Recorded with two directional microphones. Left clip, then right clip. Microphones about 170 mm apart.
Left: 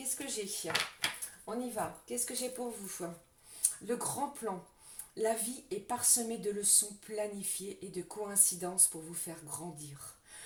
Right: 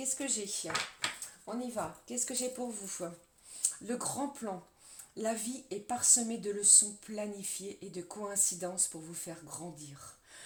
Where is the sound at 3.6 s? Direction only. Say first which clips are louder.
Left 1 dB; 35° right (ahead or behind).